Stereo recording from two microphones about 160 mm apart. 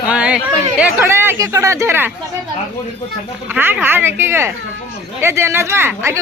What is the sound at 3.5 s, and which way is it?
Speech, 10° right (ahead or behind).